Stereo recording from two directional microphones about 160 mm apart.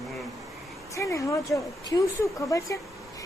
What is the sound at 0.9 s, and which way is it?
A woman's voice, 20° left (ahead or behind).